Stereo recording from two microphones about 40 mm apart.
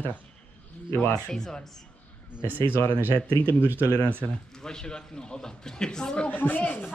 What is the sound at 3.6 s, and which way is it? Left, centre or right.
Speech, right.